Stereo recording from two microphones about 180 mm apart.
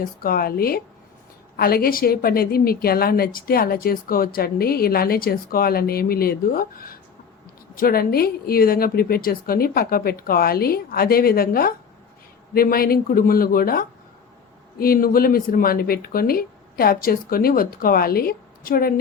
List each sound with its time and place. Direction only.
0.0 s a woman's voice: 55° left (ahead or behind)